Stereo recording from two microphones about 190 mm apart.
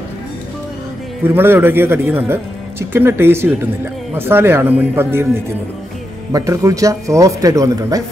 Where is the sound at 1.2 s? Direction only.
10° right (ahead or behind).